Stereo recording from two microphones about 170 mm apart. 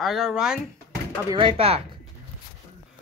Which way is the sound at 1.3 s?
30° right (ahead or behind).